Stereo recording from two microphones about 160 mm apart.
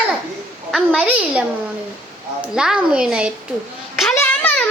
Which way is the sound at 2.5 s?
5° right (ahead or behind).